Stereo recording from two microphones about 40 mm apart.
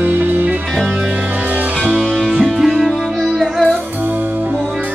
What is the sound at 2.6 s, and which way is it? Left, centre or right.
Music, centre.